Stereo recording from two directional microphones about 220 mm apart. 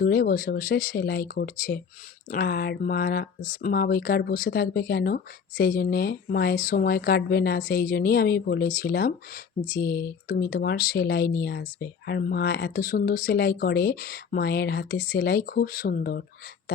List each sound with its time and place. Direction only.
0.0 s speech: 45° left (ahead or behind)